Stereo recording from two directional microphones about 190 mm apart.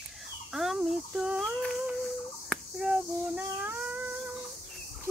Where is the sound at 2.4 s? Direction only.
Centre (ahead or behind).